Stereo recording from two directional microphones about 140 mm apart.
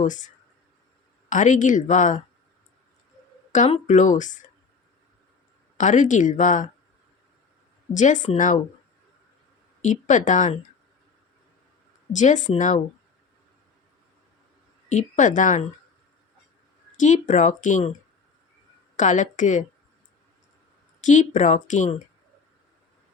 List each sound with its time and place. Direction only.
0.0 s a woman's voice: 65° left (ahead or behind)
1.3 s a woman's voice: 65° left (ahead or behind)
3.7 s a woman's voice: 60° left (ahead or behind)
5.7 s a woman's voice: 60° left (ahead or behind)
7.9 s a woman's voice: 60° left (ahead or behind)
9.8 s a woman's voice: 60° left (ahead or behind)
12.1 s a woman's voice: 60° left (ahead or behind)
14.8 s a woman's voice: 60° left (ahead or behind)
17.0 s a woman's voice: 60° left (ahead or behind)
18.9 s a woman's voice: 60° left (ahead or behind)
21.0 s a woman's voice: 65° left (ahead or behind)